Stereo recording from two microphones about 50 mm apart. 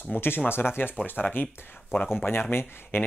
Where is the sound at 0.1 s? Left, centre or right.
Left.